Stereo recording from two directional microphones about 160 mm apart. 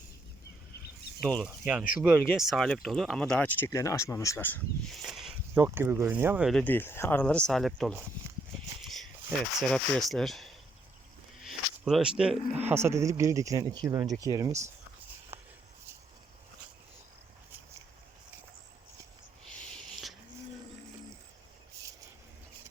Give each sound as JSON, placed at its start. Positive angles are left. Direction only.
{"t": 1.2, "sound": "speech", "side_deg": 5}
{"t": 2.0, "sound": "speech", "side_deg": -5}
{"t": 3.7, "sound": "speech", "side_deg": 20}
{"t": 5.0, "sound": "a sound", "side_deg": -5}
{"t": 5.5, "sound": "speech", "side_deg": -15}
{"t": 6.5, "sound": "speech", "side_deg": 10}
{"t": 9.6, "sound": "speech", "side_deg": 5}
{"t": 15.3, "sound": "a sound", "side_deg": -15}
{"t": 19.5, "sound": "a sound", "side_deg": 5}